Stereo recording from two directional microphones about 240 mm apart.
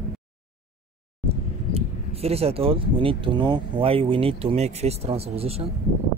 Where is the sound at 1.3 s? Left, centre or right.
Right.